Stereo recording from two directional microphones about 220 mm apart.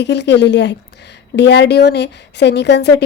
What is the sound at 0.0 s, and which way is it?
A woman's voice, 50° left (ahead or behind).